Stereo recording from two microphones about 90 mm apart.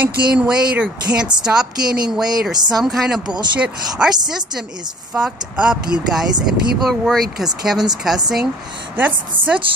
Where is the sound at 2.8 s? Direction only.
5° right (ahead or behind).